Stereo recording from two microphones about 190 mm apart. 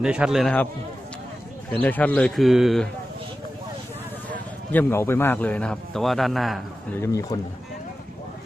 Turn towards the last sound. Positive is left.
turn(degrees=15)  # may be behind; listen again after turning